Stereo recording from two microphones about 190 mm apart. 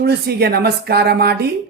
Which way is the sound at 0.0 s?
55° right (ahead or behind).